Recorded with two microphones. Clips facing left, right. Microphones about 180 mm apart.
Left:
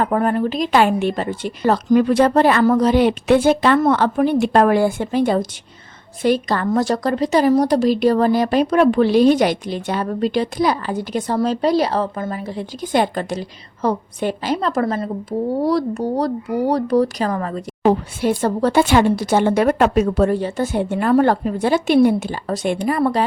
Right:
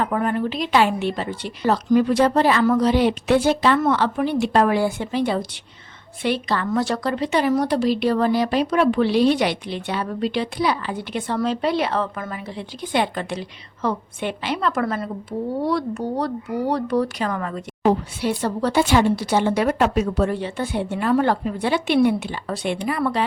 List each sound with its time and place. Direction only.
0.0 s a woman's voice: 40° left (ahead or behind)
3.8 s a woman's voice: 45° left (ahead or behind)
17.8 s a woman's voice: 50° left (ahead or behind)